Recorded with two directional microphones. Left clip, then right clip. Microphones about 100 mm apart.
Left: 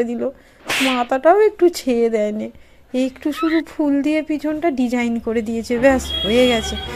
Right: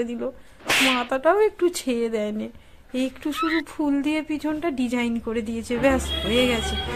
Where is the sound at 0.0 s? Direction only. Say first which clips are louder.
Left 7 dB; 30° left (ahead or behind).